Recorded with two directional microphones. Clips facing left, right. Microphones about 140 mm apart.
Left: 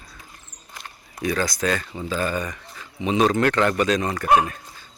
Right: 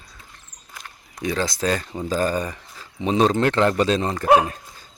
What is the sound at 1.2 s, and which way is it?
Speech, 25° right (ahead or behind).